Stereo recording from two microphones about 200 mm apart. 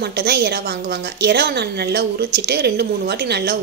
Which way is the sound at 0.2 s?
55° right (ahead or behind).